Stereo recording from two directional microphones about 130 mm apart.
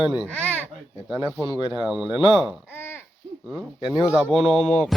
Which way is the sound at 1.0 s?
5° right (ahead or behind).